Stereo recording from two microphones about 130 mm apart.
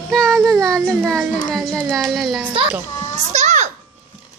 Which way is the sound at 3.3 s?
65° right (ahead or behind).